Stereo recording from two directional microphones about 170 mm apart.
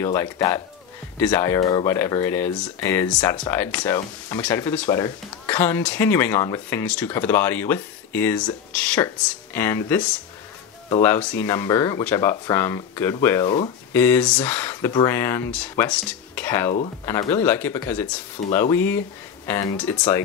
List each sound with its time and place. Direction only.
0.0 s speech: 15° left (ahead or behind)